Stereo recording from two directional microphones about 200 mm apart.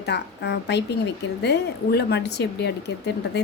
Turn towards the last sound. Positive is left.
turn(degrees=55)  # may be behind; listen again after turning